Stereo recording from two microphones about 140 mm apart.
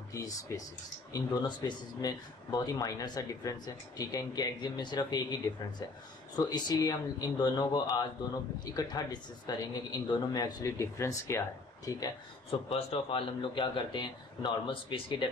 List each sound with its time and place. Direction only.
0.1 s speech: 25° left (ahead or behind)
12.4 s a man's voice: 45° left (ahead or behind)